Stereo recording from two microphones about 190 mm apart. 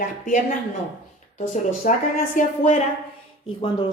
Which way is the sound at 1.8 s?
45° left (ahead or behind).